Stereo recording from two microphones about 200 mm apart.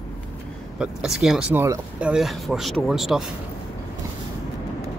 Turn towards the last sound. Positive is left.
turn(degrees=0)  # may be behind; listen again after turning